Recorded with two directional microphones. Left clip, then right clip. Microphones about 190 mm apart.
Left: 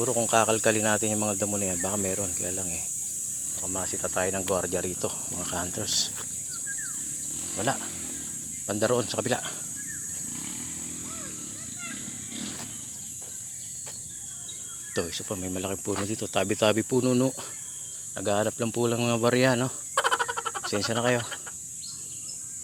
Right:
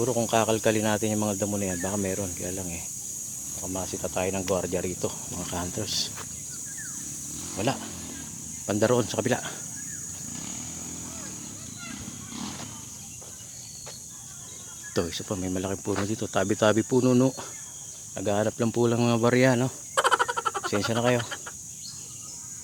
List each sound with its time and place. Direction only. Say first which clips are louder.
0.0 s speech: even; 10° right (ahead or behind)
7.6 s speech: even; 20° right (ahead or behind)
14.9 s speech: right 2 dB; 15° right (ahead or behind)